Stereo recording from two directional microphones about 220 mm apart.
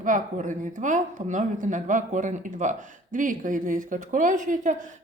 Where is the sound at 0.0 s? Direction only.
35° right (ahead or behind).